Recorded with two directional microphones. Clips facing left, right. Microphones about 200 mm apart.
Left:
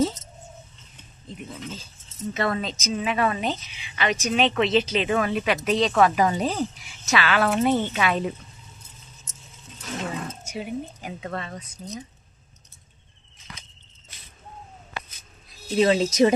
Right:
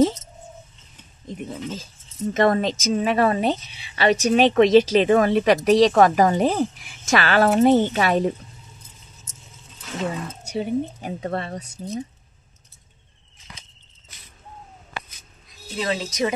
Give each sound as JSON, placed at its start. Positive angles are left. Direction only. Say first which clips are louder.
{"t": 1.5, "sound": "a woman's voice", "louder": "right 5 dB", "side_deg": -40}
{"t": 10.5, "sound": "a woman's voice", "louder": "right 9 dB", "side_deg": -35}
{"t": 15.8, "sound": "speech", "louder": "left 6 dB", "side_deg": 25}